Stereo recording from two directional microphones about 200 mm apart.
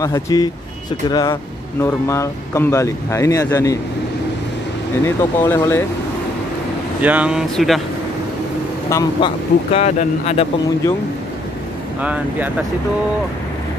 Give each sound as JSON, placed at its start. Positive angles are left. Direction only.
{"t": 0.0, "sound": "speech", "side_deg": 20}
{"t": 5.0, "sound": "speech", "side_deg": 15}
{"t": 7.0, "sound": "speech", "side_deg": -5}
{"t": 8.8, "sound": "speech", "side_deg": 15}
{"t": 9.7, "sound": "speech", "side_deg": 30}
{"t": 12.0, "sound": "speech", "side_deg": -5}